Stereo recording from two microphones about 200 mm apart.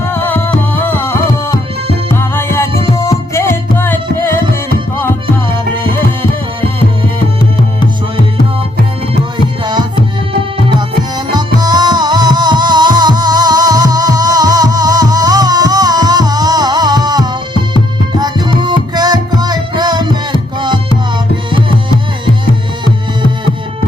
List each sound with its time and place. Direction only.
0.0 s music: 10° left (ahead or behind)
11.3 s music: 20° right (ahead or behind)
18.6 s music: 20° right (ahead or behind)